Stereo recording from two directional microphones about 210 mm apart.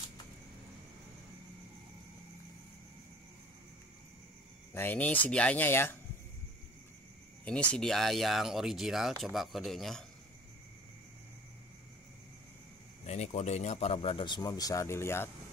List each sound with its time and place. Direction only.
4.7 s speech: 10° left (ahead or behind)
7.4 s speech: 5° left (ahead or behind)
13.0 s speech: 30° left (ahead or behind); by 15.2 s 10° left (ahead or behind)